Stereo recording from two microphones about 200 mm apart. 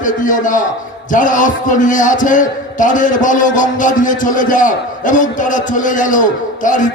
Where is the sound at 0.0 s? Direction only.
40° left (ahead or behind).